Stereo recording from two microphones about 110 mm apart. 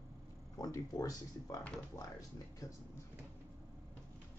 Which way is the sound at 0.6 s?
35° left (ahead or behind).